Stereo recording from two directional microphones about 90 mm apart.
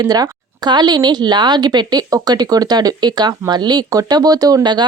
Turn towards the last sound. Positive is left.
turn(degrees=-50)  # may be behind; listen again after turning